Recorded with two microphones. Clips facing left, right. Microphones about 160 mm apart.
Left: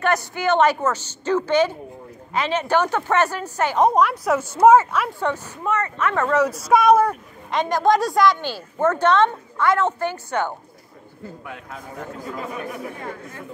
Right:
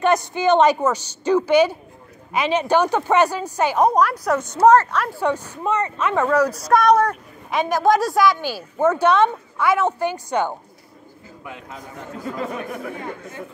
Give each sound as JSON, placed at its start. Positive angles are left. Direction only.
{"t": 0.0, "sound": "speech", "side_deg": -20}
{"t": 3.8, "sound": "a woman's voice", "side_deg": 0}
{"t": 5.2, "sound": "speech", "side_deg": -15}
{"t": 6.2, "sound": "a woman's voice", "side_deg": 0}
{"t": 11.4, "sound": "a woman's voice", "side_deg": 0}